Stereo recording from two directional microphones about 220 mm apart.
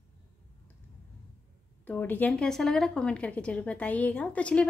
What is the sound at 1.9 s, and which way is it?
A woman's voice, 10° left (ahead or behind).